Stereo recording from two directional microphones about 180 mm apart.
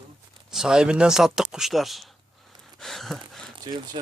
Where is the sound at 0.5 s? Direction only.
5° right (ahead or behind).